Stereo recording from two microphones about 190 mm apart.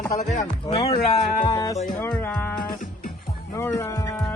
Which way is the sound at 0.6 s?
25° left (ahead or behind).